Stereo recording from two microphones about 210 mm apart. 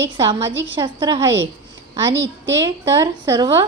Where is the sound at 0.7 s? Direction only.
20° right (ahead or behind).